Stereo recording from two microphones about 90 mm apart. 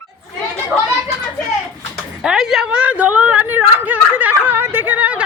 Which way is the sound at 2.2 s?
5° right (ahead or behind).